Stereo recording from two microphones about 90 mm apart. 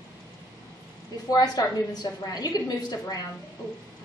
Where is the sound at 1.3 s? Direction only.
45° left (ahead or behind).